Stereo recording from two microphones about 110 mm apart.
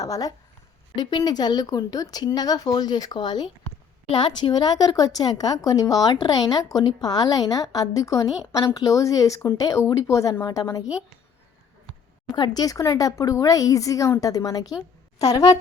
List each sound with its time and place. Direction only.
0.0 s speech: 35° left (ahead or behind)
12.3 s speech: 40° left (ahead or behind)